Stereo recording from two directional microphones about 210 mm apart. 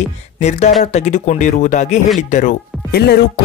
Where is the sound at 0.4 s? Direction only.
35° left (ahead or behind).